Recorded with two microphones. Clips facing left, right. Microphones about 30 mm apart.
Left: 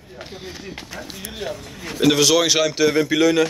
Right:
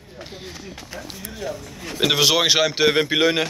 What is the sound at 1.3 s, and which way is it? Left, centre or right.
Speech, left.